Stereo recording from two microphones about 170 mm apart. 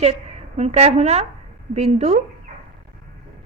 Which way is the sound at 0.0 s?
40° right (ahead or behind).